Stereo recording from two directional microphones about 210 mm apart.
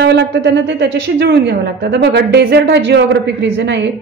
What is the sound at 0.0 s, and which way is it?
A woman's voice, 55° right (ahead or behind).